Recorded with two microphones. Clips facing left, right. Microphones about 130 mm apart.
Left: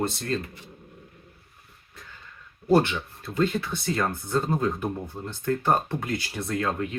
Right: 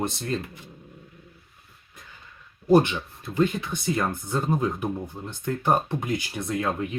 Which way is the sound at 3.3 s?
15° right (ahead or behind).